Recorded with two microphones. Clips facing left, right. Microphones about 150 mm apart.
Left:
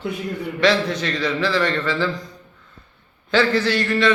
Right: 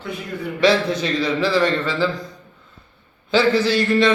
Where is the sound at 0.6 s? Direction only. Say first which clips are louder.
Right 2 dB; 10° right (ahead or behind).